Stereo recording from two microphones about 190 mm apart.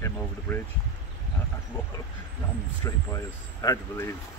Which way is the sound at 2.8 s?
15° left (ahead or behind).